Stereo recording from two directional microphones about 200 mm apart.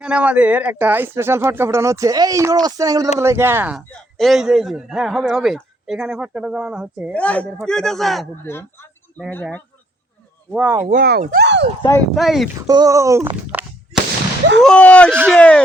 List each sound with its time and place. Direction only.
0.0 s a man's voice: 5° right (ahead or behind)
7.1 s a man's voice: 5° left (ahead or behind)
8.4 s speech: 10° left (ahead or behind)
10.5 s speech: 10° right (ahead or behind)
10.8 s speech: 50° right (ahead or behind)
11.4 s speech: 60° right (ahead or behind)
11.8 s speech: 15° left (ahead or behind)
12.1 s a man's voice: centre (ahead or behind)
12.6 s a sound: 20° right (ahead or behind)
14.6 s a man's voice: 5° left (ahead or behind)